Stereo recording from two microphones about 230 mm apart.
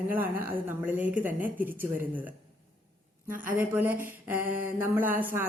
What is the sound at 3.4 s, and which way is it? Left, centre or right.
Speech, centre.